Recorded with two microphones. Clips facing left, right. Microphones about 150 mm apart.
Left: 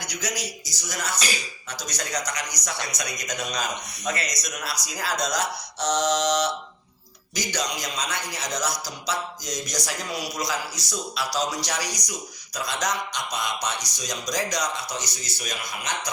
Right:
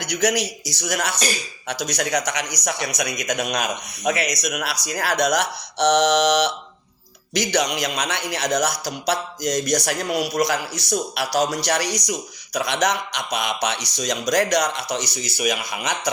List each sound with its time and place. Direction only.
0.0 s a man's voice: 65° right (ahead or behind)